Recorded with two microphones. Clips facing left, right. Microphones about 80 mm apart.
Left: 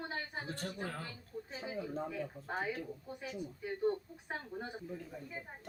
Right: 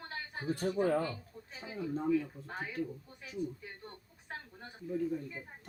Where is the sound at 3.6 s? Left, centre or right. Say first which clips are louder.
Left 15 dB; centre.